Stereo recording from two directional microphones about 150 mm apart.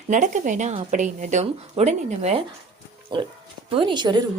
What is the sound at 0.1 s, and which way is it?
Speech, 55° right (ahead or behind).